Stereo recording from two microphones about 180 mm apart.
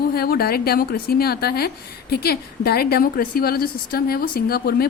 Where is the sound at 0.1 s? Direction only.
60° left (ahead or behind).